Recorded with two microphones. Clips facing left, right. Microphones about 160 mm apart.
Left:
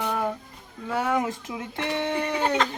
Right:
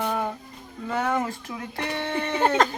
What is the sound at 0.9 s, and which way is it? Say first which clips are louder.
Speech: even; 5° left (ahead or behind).